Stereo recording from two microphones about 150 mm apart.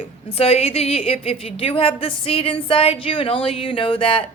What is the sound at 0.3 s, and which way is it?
A woman's voice, 40° left (ahead or behind).